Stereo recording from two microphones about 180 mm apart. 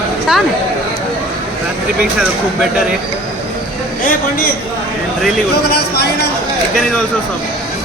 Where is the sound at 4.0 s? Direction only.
50° left (ahead or behind).